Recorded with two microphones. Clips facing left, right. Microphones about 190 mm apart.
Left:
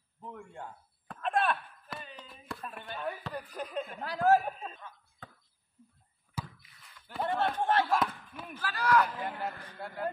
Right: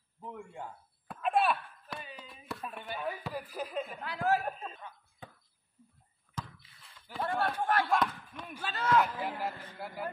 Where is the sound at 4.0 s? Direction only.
40° left (ahead or behind).